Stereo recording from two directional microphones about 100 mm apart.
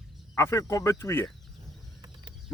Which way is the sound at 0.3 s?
30° left (ahead or behind).